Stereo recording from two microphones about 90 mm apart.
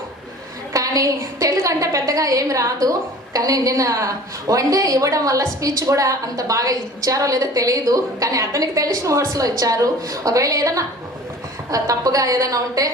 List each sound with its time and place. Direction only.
0.7 s a woman's voice: 40° right (ahead or behind)